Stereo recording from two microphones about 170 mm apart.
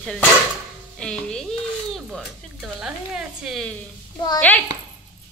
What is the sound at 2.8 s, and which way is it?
A child's voice, 5° right (ahead or behind).